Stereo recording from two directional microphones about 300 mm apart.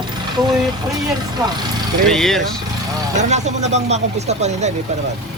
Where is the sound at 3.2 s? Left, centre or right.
Right.